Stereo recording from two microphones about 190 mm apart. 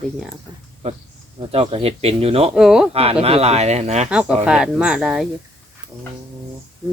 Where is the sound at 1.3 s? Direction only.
30° right (ahead or behind).